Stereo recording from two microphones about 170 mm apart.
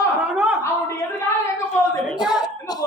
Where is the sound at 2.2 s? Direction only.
25° left (ahead or behind).